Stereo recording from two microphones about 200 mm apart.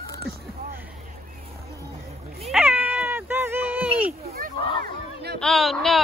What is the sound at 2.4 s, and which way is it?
Cat, 5° right (ahead or behind).